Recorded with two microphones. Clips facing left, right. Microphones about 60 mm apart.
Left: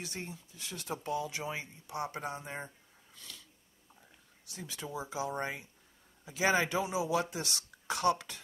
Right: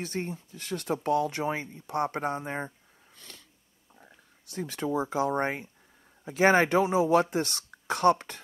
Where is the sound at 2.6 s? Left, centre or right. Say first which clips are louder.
Right 8 dB; right.